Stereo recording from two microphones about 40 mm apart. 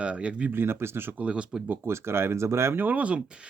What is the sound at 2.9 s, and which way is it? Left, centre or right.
Speech, right.